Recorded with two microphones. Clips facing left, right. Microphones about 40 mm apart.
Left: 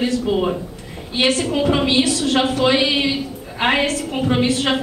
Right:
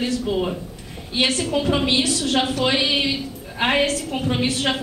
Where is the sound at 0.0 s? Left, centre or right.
Centre.